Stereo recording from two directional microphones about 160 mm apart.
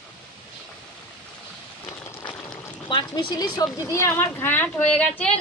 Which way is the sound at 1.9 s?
10° left (ahead or behind).